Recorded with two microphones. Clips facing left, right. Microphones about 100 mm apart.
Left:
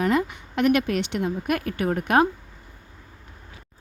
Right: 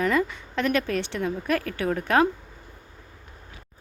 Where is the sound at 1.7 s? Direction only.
50° left (ahead or behind).